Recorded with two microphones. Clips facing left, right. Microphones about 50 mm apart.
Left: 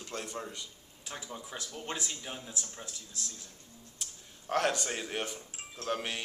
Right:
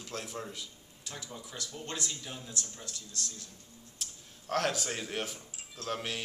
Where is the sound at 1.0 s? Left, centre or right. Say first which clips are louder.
Left 2 dB; left.